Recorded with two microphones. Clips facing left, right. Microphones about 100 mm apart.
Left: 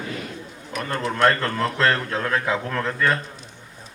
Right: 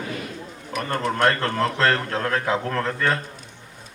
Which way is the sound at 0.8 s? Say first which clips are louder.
Left 1 dB; 45° right (ahead or behind).